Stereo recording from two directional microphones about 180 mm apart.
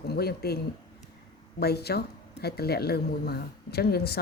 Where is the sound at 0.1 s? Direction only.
60° left (ahead or behind).